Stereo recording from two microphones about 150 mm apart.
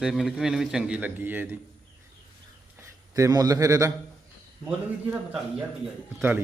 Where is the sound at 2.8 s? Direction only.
20° right (ahead or behind).